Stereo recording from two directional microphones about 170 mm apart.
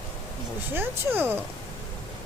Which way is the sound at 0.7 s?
10° right (ahead or behind).